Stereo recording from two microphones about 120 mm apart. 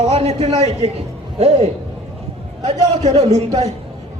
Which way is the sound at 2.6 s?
65° right (ahead or behind).